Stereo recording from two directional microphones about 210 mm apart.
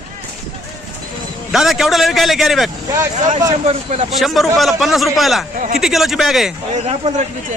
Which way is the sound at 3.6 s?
30° right (ahead or behind).